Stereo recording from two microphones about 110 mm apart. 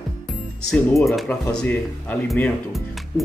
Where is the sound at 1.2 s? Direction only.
15° left (ahead or behind).